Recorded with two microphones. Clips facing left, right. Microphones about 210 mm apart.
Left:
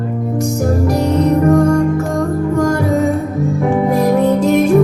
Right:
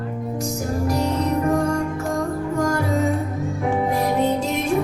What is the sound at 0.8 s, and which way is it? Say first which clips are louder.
Music: left 7 dB; 60° left (ahead or behind).